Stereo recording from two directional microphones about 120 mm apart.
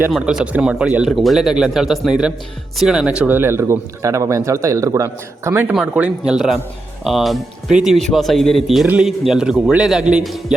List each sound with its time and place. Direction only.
0.1 s speech: 5° right (ahead or behind); by 5.6 s 25° right (ahead or behind)
5.7 s speech: 5° right (ahead or behind)